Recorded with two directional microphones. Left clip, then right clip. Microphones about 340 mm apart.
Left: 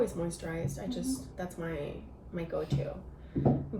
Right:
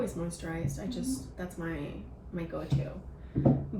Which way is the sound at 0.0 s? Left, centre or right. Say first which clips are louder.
Left 3 dB; centre.